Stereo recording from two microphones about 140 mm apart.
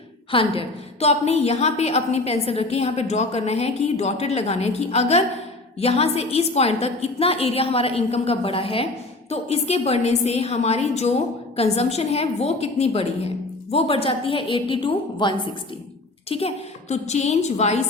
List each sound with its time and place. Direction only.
0.3 s a woman's voice: 40° left (ahead or behind)